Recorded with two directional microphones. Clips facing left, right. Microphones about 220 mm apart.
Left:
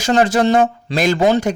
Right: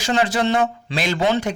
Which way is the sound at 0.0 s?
45° left (ahead or behind).